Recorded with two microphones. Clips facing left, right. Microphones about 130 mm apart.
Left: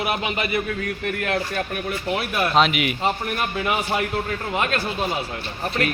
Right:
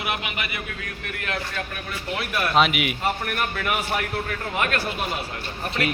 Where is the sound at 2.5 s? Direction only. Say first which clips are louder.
Left 1 dB; 5° right (ahead or behind).